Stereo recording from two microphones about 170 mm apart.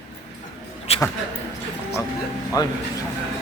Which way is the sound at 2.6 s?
20° left (ahead or behind).